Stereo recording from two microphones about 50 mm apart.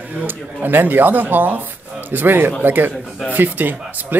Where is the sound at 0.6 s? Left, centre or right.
Right.